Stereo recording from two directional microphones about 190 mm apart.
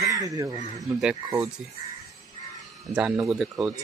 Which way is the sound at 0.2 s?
20° right (ahead or behind).